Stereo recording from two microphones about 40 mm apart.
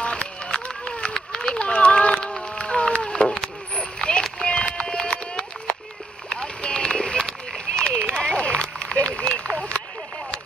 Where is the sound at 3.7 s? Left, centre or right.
Left.